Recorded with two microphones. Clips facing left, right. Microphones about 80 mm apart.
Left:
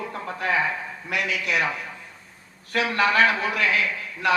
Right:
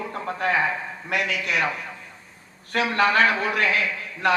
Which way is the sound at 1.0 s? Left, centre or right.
Right.